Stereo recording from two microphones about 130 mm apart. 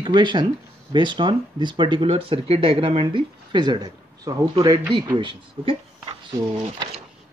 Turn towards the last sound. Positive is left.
turn(degrees=-35)  # may be behind; listen again after turning